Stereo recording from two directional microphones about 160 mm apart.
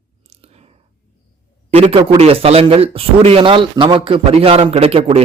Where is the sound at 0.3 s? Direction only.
40° right (ahead or behind).